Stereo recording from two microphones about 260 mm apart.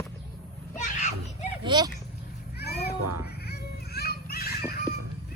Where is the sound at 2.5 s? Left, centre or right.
Left.